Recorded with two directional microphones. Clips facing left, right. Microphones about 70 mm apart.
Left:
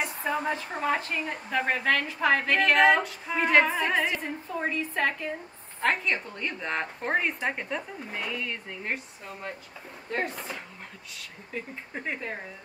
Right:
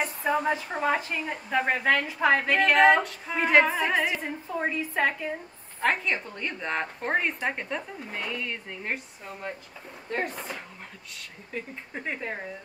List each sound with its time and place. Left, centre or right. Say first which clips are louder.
0.2 s a woman's voice: right 5 dB; centre